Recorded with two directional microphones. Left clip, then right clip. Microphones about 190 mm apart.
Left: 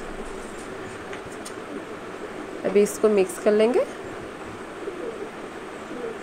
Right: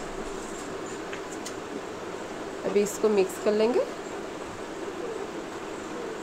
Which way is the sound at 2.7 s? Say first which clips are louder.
Left 5 dB; 20° left (ahead or behind).